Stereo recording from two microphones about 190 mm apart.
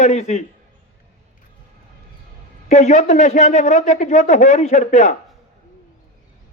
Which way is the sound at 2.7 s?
35° left (ahead or behind).